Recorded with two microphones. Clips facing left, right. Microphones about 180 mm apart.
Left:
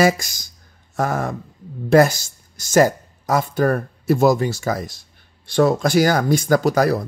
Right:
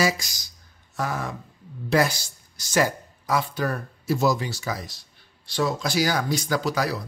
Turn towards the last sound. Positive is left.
turn(degrees=50)  # may be behind; listen again after turning